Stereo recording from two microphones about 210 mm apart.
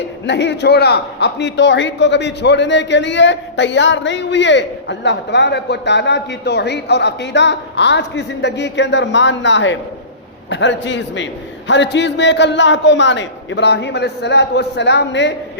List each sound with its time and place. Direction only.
0.3 s a man's voice: 55° left (ahead or behind)